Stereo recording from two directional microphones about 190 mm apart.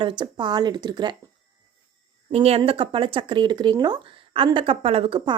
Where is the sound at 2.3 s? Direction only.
30° right (ahead or behind).